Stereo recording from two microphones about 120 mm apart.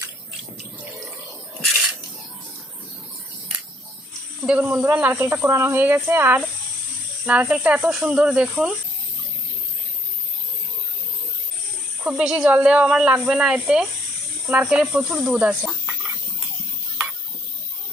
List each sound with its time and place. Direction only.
4.4 s speech: 5° right (ahead or behind)
4.7 s a woman's voice: 15° right (ahead or behind)
12.0 s a woman's voice: 5° right (ahead or behind)